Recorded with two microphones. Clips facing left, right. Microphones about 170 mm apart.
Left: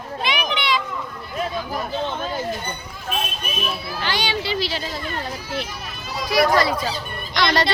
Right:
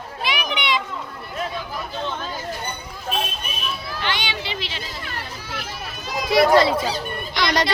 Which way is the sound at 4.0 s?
35° left (ahead or behind).